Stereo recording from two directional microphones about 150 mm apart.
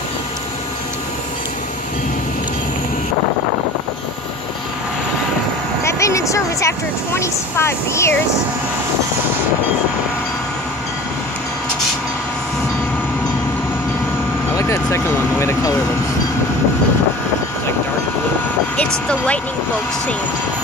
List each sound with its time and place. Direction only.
5.9 s a sound: 20° left (ahead or behind)
7.2 s speech: 20° left (ahead or behind)
14.6 s speech: 20° left (ahead or behind)
18.8 s speech: 10° left (ahead or behind)